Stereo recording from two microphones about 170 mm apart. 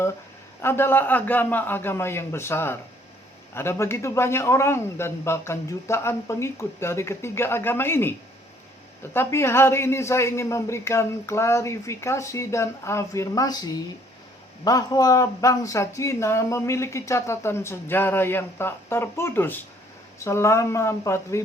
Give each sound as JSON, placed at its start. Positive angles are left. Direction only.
{"t": 0.6, "sound": "speech", "side_deg": 15}
{"t": 9.1, "sound": "speech", "side_deg": 15}